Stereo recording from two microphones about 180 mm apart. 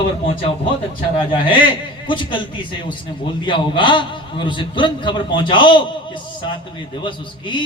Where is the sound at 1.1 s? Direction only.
25° left (ahead or behind).